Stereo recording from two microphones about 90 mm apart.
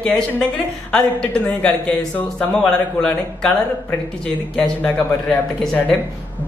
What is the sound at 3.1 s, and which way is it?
Speech, 20° left (ahead or behind).